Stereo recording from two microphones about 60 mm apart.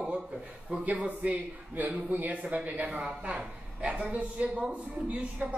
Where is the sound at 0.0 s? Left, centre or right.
Centre.